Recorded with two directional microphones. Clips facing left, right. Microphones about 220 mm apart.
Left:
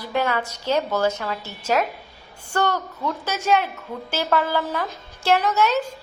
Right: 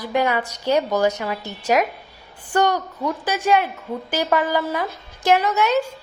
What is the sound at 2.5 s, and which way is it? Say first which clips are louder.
A woman's voice: right 4 dB; 15° right (ahead or behind).